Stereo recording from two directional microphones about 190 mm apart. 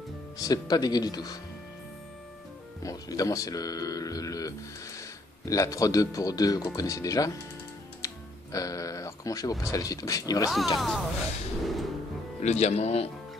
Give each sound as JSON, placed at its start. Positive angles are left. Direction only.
{"t": 0.4, "sound": "speech", "side_deg": 20}
{"t": 2.8, "sound": "speech", "side_deg": 20}
{"t": 10.8, "sound": "speech", "side_deg": 0}
{"t": 11.6, "sound": "music", "side_deg": 0}
{"t": 12.4, "sound": "speech", "side_deg": 35}